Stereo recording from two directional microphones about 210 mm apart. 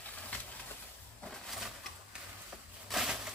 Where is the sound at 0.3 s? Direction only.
5° left (ahead or behind).